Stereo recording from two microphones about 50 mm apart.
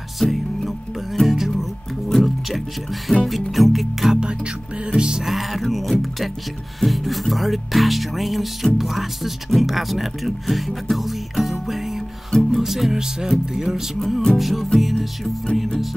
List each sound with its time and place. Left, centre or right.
0.2 s music: centre
3.3 s speech: centre
4.1 s speech: centre
5.3 s speech: centre
11.6 s music: centre
13.3 s speech: centre
13.9 s speech: centre